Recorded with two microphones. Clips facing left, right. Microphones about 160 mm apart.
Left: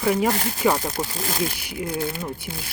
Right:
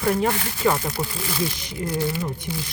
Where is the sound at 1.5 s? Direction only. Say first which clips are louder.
Even; 10° left (ahead or behind).